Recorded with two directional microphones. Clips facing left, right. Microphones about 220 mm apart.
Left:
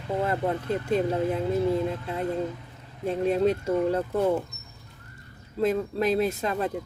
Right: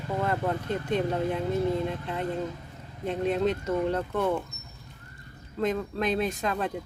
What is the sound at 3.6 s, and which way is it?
Speech, 10° left (ahead or behind).